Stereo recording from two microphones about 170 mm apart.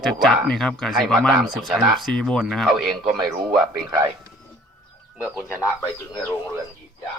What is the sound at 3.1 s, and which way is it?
Speech, 25° right (ahead or behind).